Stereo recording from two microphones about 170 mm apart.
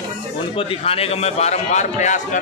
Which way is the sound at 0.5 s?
30° left (ahead or behind).